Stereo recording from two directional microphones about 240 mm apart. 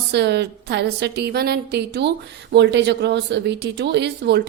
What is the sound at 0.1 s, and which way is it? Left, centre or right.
Speech, right.